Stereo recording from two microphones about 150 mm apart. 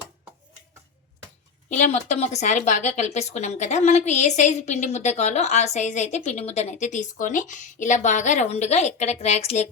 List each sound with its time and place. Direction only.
1.7 s speech: 50° left (ahead or behind)